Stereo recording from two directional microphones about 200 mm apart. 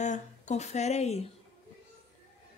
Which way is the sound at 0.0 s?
35° left (ahead or behind).